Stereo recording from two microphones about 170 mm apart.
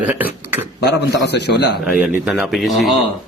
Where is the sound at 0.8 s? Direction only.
80° left.